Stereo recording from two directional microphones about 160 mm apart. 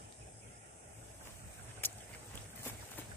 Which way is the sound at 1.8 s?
15° left (ahead or behind).